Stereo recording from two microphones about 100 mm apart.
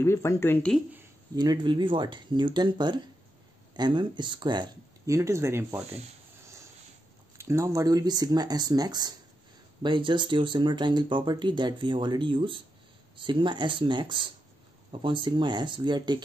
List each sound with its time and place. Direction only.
0.0 s speech: 25° left (ahead or behind)
1.3 s speech: 45° right (ahead or behind)
5.0 s speech: 30° right (ahead or behind)
6.4 s a sound: 30° right (ahead or behind)
7.3 s speech: 25° right (ahead or behind)
9.8 s speech: 55° right (ahead or behind)